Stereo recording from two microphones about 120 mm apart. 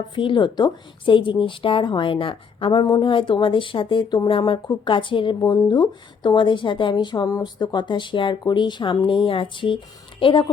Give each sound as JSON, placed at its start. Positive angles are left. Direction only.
{"t": 0.1, "sound": "speech", "side_deg": 45}